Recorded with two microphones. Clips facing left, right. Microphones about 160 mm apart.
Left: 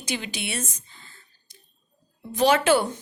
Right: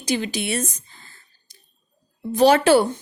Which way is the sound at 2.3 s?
35° right (ahead or behind).